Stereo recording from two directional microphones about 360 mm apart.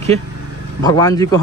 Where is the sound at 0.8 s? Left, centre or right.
Centre.